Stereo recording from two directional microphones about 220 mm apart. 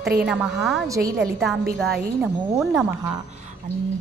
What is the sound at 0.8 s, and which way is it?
Speech, 15° right (ahead or behind).